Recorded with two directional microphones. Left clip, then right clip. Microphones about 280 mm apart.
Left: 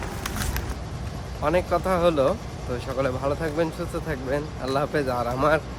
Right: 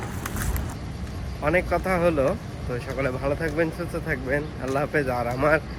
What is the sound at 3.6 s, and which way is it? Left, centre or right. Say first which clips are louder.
Speech: even; centre.